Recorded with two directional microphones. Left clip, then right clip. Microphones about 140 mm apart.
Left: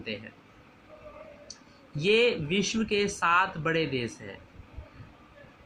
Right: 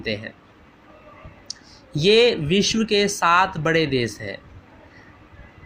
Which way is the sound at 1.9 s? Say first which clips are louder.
Right 8 dB; 45° right (ahead or behind).